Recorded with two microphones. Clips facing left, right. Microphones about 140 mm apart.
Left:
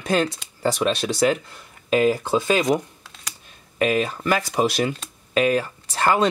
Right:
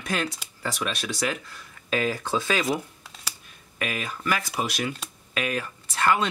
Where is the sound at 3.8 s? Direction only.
35° left (ahead or behind).